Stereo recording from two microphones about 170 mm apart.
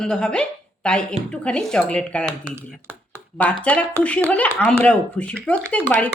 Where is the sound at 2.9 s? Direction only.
10° left (ahead or behind).